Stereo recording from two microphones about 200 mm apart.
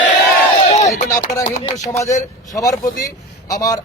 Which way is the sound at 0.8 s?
15° left (ahead or behind).